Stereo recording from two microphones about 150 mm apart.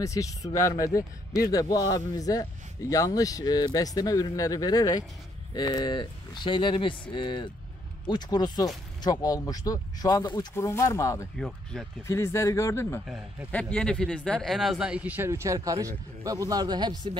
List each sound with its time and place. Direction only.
0.0 s speech: 20° left (ahead or behind)
11.3 s speech: centre (ahead or behind)
12.1 s speech: 20° left (ahead or behind)
13.0 s speech: 5° right (ahead or behind)
13.5 s speech: 5° left (ahead or behind); by 17.2 s 30° right (ahead or behind)